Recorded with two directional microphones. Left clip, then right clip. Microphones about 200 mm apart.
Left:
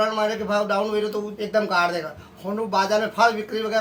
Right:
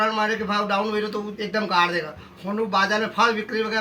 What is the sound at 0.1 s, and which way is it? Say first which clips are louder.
A man's voice: even; 15° left (ahead or behind).